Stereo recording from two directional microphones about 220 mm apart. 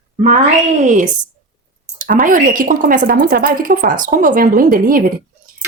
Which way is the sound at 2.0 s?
35° right (ahead or behind).